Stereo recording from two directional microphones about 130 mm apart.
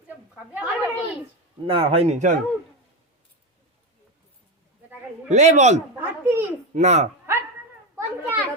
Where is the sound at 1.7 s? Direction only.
45° right (ahead or behind); by 2.3 s 65° right (ahead or behind).